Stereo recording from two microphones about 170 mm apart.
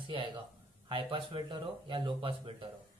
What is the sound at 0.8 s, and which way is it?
A man's voice, 30° right (ahead or behind).